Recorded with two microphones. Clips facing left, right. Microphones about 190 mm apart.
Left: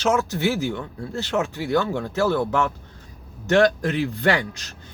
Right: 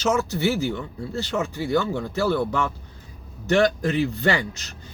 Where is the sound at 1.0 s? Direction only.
60° left (ahead or behind).